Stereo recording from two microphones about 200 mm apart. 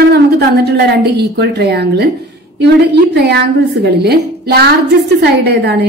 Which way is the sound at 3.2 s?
55° right (ahead or behind).